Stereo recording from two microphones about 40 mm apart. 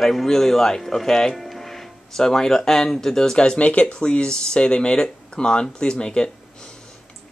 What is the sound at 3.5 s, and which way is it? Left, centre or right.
Speech, left.